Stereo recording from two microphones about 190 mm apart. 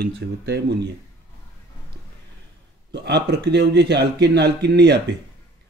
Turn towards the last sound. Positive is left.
turn(degrees=-60)  # may be behind; listen again after turning